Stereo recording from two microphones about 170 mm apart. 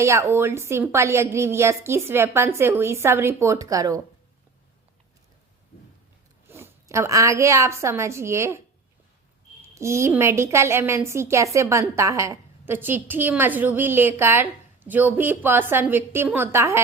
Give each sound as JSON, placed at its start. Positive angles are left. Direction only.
{"t": 0.0, "sound": "a woman's voice", "side_deg": -15}
{"t": 6.5, "sound": "a woman's voice", "side_deg": -15}